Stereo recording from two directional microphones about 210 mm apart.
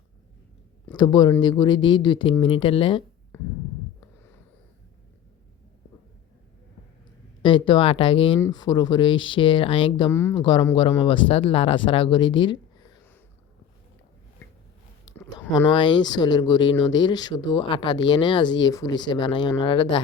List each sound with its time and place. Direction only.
0.9 s speech: 20° left (ahead or behind)
3.3 s a sound: 10° left (ahead or behind)
7.4 s speech: 25° left (ahead or behind)
10.1 s a woman's voice: 10° left (ahead or behind)
10.4 s speech: 20° left (ahead or behind)
15.5 s speech: 20° left (ahead or behind)